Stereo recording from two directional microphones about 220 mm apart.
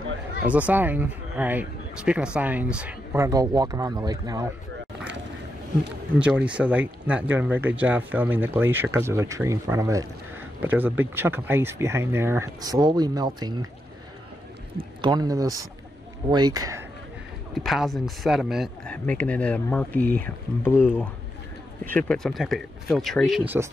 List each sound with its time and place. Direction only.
0.5 s speech: 5° right (ahead or behind)
6.1 s speech: 5° right (ahead or behind)
14.8 s speech: 20° right (ahead or behind)
17.6 s speech: centre (ahead or behind)